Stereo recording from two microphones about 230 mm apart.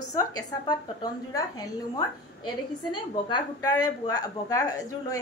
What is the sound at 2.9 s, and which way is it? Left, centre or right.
A woman's voice, centre.